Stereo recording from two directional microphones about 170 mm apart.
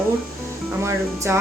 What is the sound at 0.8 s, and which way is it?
Speech, 15° right (ahead or behind).